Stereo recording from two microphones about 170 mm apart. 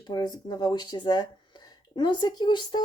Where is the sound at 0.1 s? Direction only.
25° left (ahead or behind).